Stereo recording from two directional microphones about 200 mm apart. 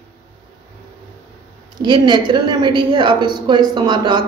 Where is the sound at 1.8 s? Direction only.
20° right (ahead or behind).